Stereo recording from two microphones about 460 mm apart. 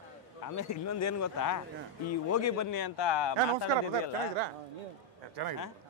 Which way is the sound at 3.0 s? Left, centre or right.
Left.